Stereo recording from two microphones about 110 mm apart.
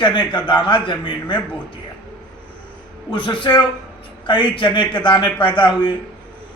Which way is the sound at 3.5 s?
40° left (ahead or behind).